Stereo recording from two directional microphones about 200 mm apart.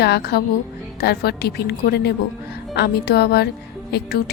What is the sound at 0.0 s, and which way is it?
A woman's voice, 55° left (ahead or behind).